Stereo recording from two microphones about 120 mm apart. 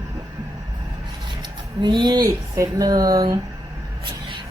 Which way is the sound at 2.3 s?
30° right (ahead or behind).